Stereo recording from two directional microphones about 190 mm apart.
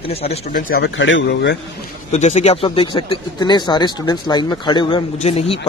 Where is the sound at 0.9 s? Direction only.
80° left.